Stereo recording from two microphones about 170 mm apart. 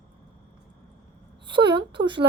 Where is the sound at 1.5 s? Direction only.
30° right (ahead or behind).